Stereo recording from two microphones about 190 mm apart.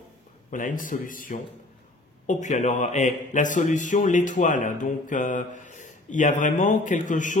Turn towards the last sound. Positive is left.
turn(degrees=40)  # may be behind; listen again after turning